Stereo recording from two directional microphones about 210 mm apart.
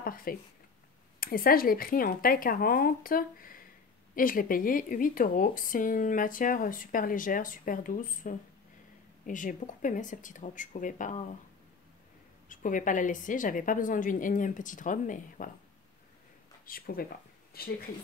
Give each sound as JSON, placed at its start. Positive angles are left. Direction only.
{"t": 0.0, "sound": "speech", "side_deg": 45}
{"t": 12.4, "sound": "speech", "side_deg": 40}
{"t": 16.6, "sound": "speech", "side_deg": 45}